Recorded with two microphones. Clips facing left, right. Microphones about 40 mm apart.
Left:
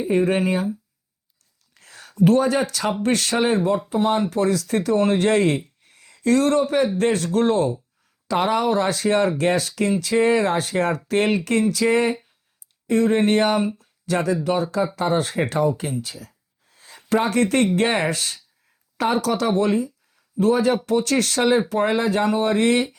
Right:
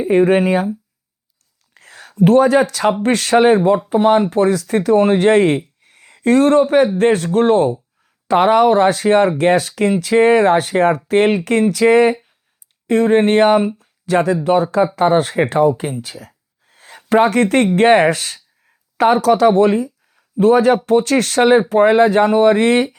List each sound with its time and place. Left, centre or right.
0.0 s speech: right
1.7 s speech: right
13.7 s a sound: right
14.4 s speech: right
15.8 s a sound: right
17.7 s speech: right